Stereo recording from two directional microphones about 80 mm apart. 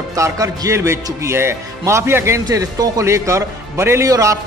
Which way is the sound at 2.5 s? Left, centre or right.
Right.